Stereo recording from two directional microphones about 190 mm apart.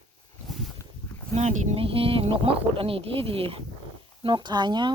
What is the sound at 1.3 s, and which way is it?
Speech, 35° right (ahead or behind).